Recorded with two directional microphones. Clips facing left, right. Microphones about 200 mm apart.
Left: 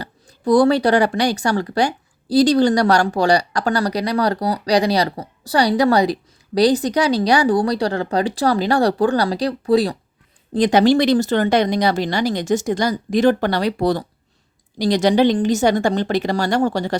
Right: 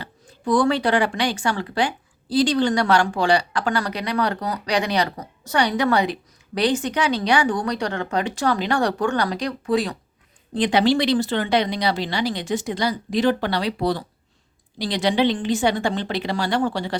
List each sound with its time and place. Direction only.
0.0 s speech: 40° left (ahead or behind)